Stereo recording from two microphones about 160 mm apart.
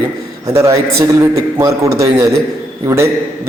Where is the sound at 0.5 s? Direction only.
20° right (ahead or behind).